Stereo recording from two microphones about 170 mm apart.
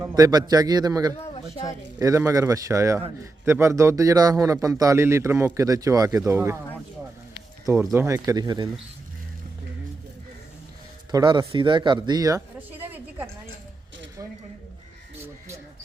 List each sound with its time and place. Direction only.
0.0 s a man's voice: 20° right (ahead or behind)
7.6 s a man's voice: 15° right (ahead or behind)
11.1 s speech: 25° right (ahead or behind)
15.2 s a sound: 15° right (ahead or behind)